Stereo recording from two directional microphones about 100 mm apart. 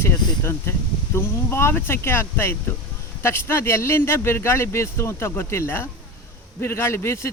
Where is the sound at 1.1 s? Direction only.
25° left (ahead or behind).